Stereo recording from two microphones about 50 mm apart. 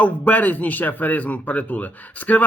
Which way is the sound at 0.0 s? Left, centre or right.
Left.